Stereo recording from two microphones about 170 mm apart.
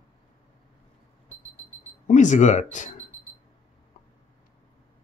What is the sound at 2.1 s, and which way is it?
Speech, 45° left (ahead or behind).